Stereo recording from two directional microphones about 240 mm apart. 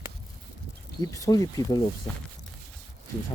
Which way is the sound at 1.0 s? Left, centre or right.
Centre.